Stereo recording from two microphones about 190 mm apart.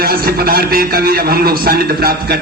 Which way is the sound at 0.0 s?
55° right (ahead or behind).